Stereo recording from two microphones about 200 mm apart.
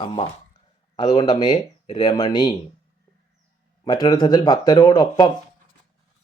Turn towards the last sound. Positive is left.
turn(degrees=20)  # may be behind; listen again after turning